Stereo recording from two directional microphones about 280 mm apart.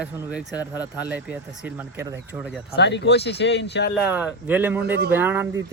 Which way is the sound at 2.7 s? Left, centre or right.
Left.